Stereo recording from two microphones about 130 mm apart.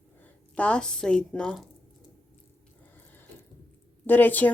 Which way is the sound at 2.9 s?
15° left (ahead or behind).